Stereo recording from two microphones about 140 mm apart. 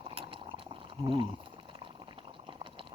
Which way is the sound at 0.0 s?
40° right (ahead or behind).